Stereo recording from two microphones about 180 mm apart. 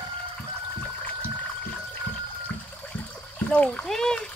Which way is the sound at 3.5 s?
5° left (ahead or behind).